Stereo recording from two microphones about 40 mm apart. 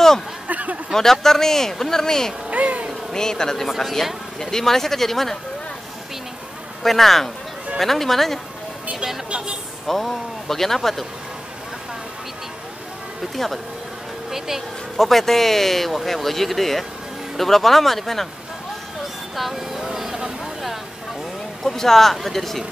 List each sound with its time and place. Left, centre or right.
0.5 s speech: right
0.9 s a man's voice: centre
2.5 s speech: right
3.1 s a man's voice: centre
6.8 s speech: centre
9.8 s speech: centre
13.4 s speech: centre
15.0 s speech: centre
19.3 s vehicle: centre
21.6 s speech: centre